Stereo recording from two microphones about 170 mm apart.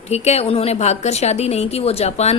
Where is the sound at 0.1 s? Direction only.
40° left (ahead or behind).